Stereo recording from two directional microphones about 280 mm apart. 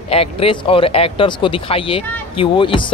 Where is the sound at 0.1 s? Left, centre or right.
Left.